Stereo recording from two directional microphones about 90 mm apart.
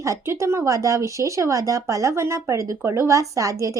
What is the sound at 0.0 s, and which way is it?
Speech, 35° right (ahead or behind).